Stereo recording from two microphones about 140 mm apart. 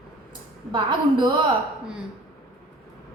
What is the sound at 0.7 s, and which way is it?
Speech, 30° right (ahead or behind).